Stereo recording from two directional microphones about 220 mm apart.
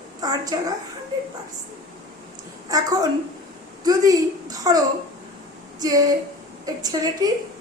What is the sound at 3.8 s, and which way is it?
A woman's voice, 15° right (ahead or behind).